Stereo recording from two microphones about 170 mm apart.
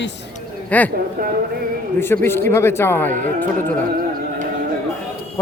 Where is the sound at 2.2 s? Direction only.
15° left (ahead or behind).